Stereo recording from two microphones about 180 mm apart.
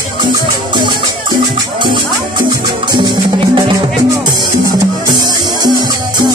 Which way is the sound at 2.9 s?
25° right (ahead or behind).